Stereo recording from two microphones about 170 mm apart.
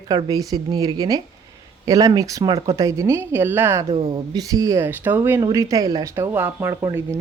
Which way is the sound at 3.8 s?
35° right (ahead or behind).